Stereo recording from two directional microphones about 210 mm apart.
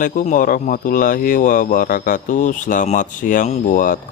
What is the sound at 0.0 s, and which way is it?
Speech, 40° left (ahead or behind).